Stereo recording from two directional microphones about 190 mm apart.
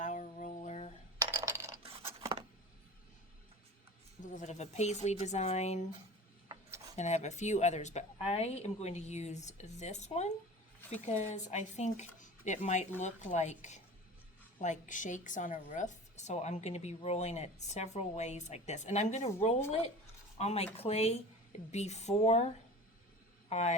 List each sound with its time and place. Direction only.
0.0 s a sound: 40° left (ahead or behind)
1.3 s coin: 15° right (ahead or behind)
4.2 s speech: 40° left (ahead or behind)
6.5 s a sound: 15° right (ahead or behind)
6.9 s speech: 35° left (ahead or behind)
23.5 s speech: 35° left (ahead or behind)